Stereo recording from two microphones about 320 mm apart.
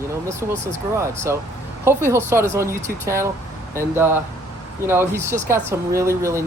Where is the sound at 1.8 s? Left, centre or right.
Centre.